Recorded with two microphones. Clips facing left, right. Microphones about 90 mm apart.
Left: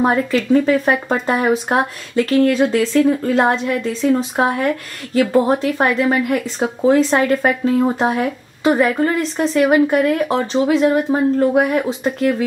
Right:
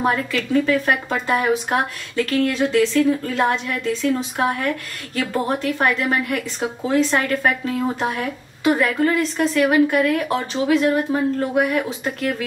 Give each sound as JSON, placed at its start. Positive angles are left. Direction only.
{"t": 0.0, "sound": "speech", "side_deg": 35}